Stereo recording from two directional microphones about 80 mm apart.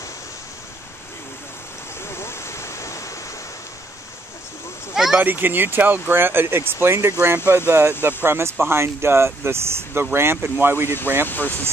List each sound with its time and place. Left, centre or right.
2.0 s waterfall: left
4.9 s speech: centre
5.2 s speech: right
11.2 s speech: left